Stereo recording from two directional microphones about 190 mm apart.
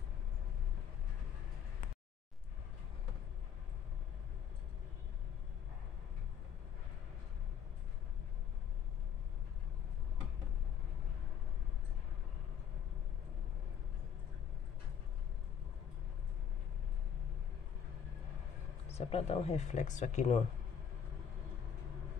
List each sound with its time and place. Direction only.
18.9 s speech: 35° left (ahead or behind)